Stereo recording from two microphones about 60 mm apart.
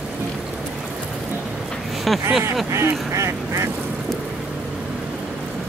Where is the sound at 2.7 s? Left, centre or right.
Right.